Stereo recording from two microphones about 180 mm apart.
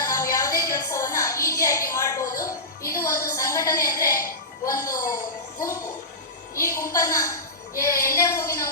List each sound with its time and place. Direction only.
0.1 s a sound: 20° left (ahead or behind)
2.9 s a woman's voice: 15° left (ahead or behind)
6.6 s a woman's voice: 20° left (ahead or behind)